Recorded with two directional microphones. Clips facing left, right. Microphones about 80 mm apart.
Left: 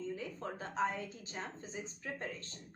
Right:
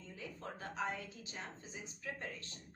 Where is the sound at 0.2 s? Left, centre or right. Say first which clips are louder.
Left 4 dB; left.